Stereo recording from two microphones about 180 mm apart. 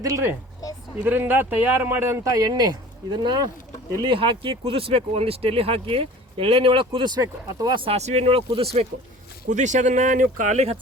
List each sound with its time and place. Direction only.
0.0 s speech: 15° right (ahead or behind)
7.9 s speech: 35° right (ahead or behind)
9.5 s speech: 40° right (ahead or behind)